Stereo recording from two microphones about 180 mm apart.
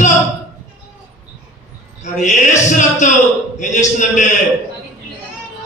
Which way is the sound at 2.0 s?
40° left (ahead or behind).